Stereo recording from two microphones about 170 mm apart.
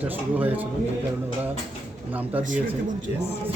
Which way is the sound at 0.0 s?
10° right (ahead or behind).